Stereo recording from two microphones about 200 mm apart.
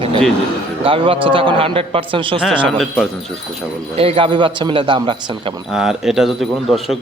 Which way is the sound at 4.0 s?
25° right (ahead or behind).